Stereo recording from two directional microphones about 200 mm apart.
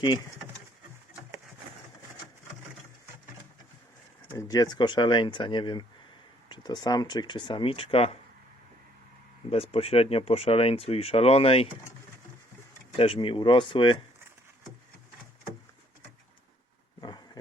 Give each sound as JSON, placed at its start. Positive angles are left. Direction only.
{"t": 4.3, "sound": "speech", "side_deg": 15}
{"t": 9.5, "sound": "speech", "side_deg": 30}
{"t": 13.0, "sound": "speech", "side_deg": 25}
{"t": 17.0, "sound": "a sound", "side_deg": 20}